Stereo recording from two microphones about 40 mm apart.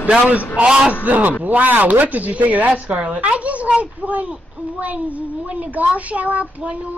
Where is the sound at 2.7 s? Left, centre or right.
Right.